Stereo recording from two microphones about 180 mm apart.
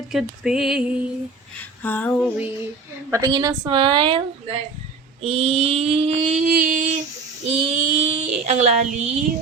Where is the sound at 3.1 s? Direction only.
20° right (ahead or behind).